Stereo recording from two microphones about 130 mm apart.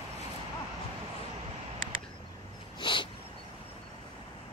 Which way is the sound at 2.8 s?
40° left (ahead or behind).